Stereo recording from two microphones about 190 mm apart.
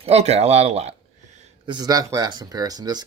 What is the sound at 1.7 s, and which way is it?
Speech, 20° right (ahead or behind).